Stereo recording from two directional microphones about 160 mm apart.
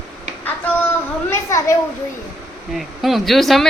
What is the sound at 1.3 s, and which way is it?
Speech, 20° left (ahead or behind).